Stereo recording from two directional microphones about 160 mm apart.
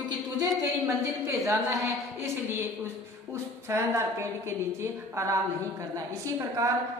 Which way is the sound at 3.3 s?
15° right (ahead or behind).